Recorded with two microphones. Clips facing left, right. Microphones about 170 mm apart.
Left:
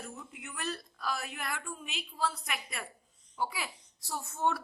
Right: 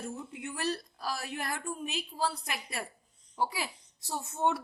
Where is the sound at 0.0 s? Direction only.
30° right (ahead or behind).